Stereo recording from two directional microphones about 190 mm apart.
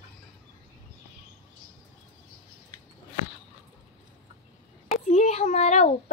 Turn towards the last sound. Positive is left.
turn(degrees=40)  # may be behind; listen again after turning